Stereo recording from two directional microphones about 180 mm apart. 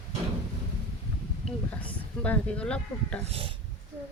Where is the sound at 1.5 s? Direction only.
5° left (ahead or behind).